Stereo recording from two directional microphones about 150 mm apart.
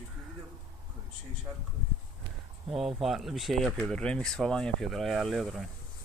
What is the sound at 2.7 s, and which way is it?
Speech, centre (ahead or behind).